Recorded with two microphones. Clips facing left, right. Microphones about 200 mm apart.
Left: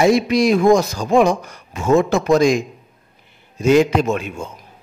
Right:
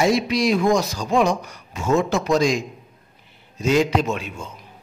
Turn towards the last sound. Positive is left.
turn(degrees=50)  # may be behind; listen again after turning